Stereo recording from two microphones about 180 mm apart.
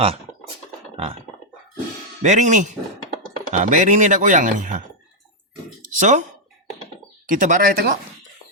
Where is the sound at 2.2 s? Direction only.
40° right (ahead or behind).